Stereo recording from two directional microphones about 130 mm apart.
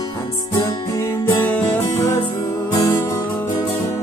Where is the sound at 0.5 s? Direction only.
30° left (ahead or behind); by 1.8 s 10° left (ahead or behind).